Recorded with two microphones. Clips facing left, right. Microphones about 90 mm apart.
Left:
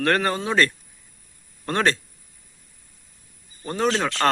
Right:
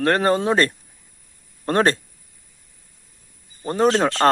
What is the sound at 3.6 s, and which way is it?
Speech, 40° right (ahead or behind).